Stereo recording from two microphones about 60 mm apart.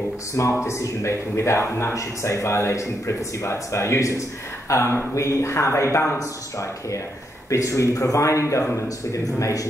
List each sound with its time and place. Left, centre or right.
0.7 s speech: left
7.4 s speech: left
8.8 s speech: left